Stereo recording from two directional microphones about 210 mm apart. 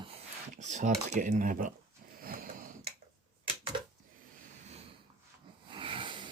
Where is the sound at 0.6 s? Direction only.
35° right (ahead or behind).